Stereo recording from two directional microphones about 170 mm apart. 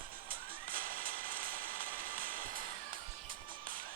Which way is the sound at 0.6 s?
55° right (ahead or behind).